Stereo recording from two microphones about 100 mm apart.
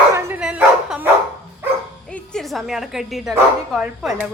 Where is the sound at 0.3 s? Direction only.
10° right (ahead or behind).